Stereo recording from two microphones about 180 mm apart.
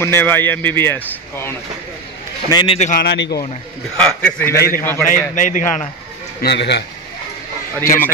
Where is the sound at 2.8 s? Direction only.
45° left (ahead or behind).